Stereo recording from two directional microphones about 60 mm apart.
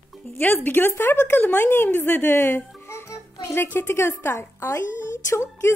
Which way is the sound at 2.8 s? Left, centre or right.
Left.